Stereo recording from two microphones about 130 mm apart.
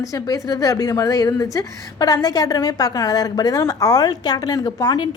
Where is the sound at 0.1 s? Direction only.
30° left (ahead or behind).